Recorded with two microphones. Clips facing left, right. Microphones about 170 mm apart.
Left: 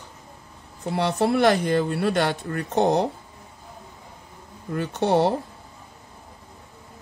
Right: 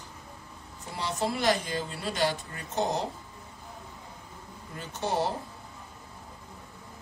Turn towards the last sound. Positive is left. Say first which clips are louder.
# left 9 dB
turn(degrees=65)  # may be behind; listen again after turning